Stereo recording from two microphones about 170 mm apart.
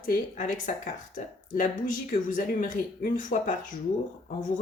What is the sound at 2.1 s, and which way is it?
Speech, 50° left (ahead or behind).